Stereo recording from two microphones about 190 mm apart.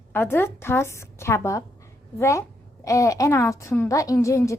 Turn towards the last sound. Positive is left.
turn(degrees=15)  # may be behind; listen again after turning